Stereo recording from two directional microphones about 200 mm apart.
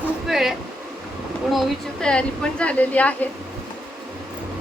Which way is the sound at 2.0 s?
5° left (ahead or behind).